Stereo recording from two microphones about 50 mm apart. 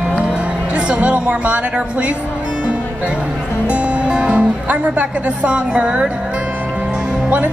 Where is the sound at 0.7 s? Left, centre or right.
Right.